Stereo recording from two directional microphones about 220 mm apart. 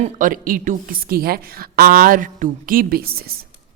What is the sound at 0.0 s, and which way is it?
A man's voice, 40° right (ahead or behind).